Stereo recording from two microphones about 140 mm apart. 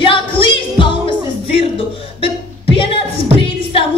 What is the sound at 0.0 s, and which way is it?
Music, 40° left (ahead or behind).